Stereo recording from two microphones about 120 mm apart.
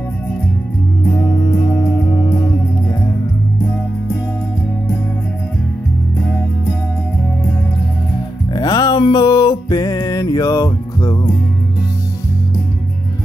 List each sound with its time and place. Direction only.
2.1 s music: 35° left (ahead or behind)
8.5 s music: 35° left (ahead or behind)